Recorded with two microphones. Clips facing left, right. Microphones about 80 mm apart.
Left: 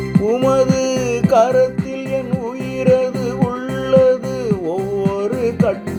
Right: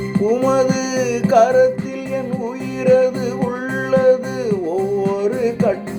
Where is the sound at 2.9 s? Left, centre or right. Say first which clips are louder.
Right 1 dB; right.